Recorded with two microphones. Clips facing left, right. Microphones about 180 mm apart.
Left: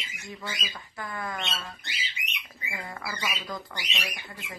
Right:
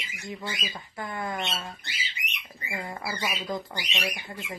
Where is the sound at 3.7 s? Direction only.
30° right (ahead or behind).